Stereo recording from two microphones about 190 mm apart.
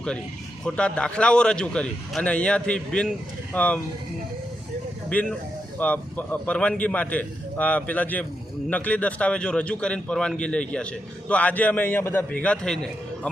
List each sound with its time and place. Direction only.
0.6 s a man's voice: 5° left (ahead or behind)
5.0 s a man's voice: 5° left (ahead or behind)